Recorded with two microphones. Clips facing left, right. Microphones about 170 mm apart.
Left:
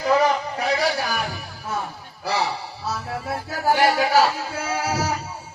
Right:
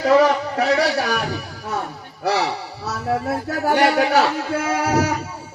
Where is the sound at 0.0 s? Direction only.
80° right.